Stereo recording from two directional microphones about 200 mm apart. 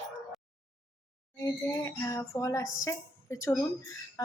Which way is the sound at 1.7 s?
15° left (ahead or behind).